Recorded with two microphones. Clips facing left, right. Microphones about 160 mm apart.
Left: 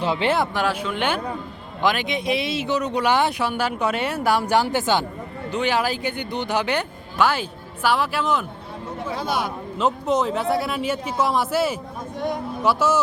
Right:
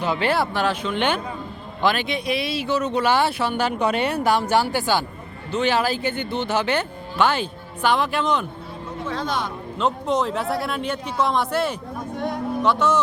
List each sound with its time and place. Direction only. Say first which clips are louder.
0.0 s a man's voice: even; 25° left (ahead or behind); by 13.0 s 5° left (ahead or behind)